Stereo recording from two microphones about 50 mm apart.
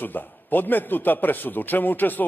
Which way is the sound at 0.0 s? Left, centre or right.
Left.